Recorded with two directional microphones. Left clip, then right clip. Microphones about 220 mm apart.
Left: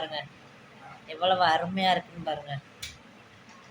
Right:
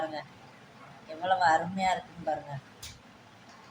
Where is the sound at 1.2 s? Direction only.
15° left (ahead or behind).